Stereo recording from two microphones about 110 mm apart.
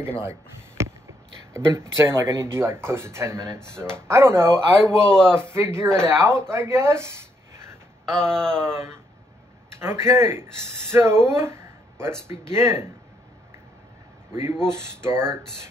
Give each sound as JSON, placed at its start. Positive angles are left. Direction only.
{"t": 0.2, "sound": "a sound", "side_deg": -25}
{"t": 1.7, "sound": "speech", "side_deg": -25}
{"t": 5.0, "sound": "a man's voice", "side_deg": 5}
{"t": 5.4, "sound": "speech", "side_deg": -25}
{"t": 8.0, "sound": "speech", "side_deg": 5}
{"t": 8.7, "sound": "speech", "side_deg": -25}
{"t": 14.3, "sound": "speech", "side_deg": -25}